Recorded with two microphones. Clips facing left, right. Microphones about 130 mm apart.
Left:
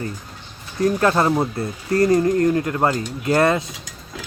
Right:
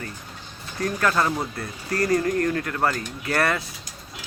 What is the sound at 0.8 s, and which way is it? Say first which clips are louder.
Speech: left 6 dB; 25° left (ahead or behind).